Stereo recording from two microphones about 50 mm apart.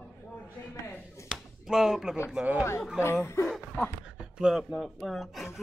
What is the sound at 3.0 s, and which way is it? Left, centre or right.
Speech, left.